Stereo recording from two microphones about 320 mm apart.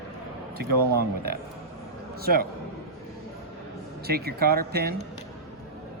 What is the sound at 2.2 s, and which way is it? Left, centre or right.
Speech, right.